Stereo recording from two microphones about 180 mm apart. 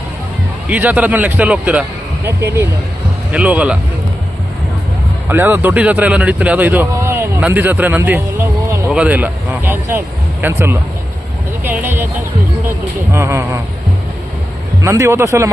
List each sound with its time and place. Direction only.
0.7 s a man's voice: 10° right (ahead or behind)
5.3 s a man's voice: 10° right (ahead or behind)
14.8 s speech: 15° right (ahead or behind)